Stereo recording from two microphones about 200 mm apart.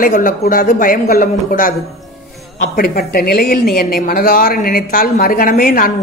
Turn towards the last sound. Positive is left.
turn(degrees=45)  # may be behind; listen again after turning